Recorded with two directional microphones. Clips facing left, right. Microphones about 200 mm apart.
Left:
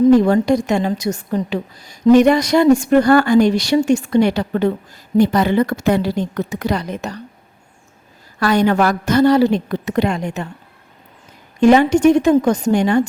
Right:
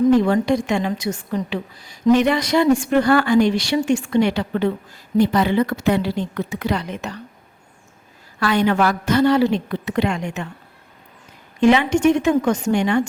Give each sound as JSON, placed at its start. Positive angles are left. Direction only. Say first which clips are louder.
{"t": 0.1, "sound": "a woman's voice", "louder": "left 4 dB", "side_deg": 40}
{"t": 8.4, "sound": "a woman's voice", "louder": "left 3 dB", "side_deg": 40}
{"t": 11.6, "sound": "a woman's voice", "louder": "left 4 dB", "side_deg": 45}